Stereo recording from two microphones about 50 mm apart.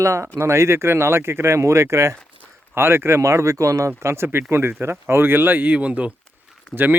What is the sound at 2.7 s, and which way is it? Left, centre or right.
Speech, right.